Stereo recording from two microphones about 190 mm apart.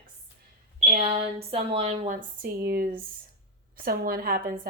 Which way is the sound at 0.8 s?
35° right (ahead or behind).